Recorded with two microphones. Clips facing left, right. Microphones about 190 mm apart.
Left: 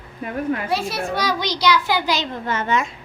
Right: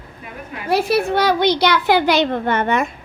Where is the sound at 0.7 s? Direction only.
60° right (ahead or behind).